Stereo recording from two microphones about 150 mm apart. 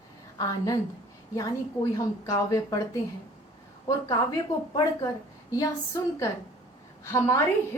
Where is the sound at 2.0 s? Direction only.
20° left (ahead or behind).